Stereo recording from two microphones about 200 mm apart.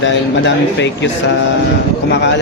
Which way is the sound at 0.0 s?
65° left (ahead or behind).